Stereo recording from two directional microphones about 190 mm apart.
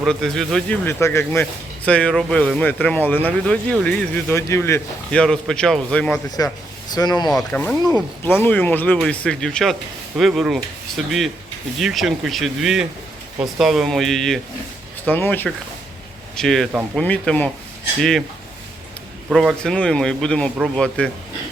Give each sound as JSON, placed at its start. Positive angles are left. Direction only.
{"t": 0.0, "sound": "speech", "side_deg": 0}
{"t": 0.9, "sound": "speech", "side_deg": 15}
{"t": 6.4, "sound": "speech", "side_deg": 15}
{"t": 7.3, "sound": "speech", "side_deg": 5}
{"t": 19.3, "sound": "speech", "side_deg": 0}